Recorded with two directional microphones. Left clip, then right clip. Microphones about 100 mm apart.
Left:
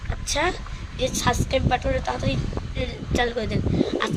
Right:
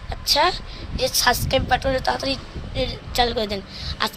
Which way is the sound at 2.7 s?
25° left (ahead or behind).